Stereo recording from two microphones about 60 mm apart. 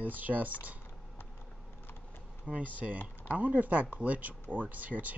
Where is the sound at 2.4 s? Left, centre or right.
Right.